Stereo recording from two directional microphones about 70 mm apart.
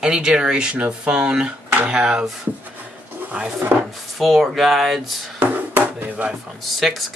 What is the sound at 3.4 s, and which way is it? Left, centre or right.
Speech, centre.